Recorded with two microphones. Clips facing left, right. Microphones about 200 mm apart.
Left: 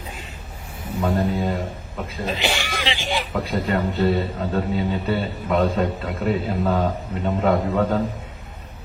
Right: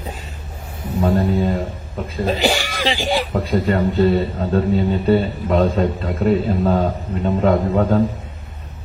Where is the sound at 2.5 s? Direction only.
35° right (ahead or behind).